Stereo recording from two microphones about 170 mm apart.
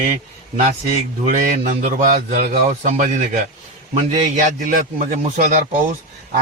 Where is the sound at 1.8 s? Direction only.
55° right (ahead or behind).